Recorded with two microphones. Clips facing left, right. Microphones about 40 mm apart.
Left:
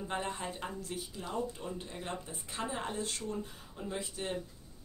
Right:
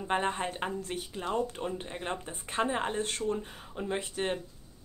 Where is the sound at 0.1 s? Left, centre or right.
Right.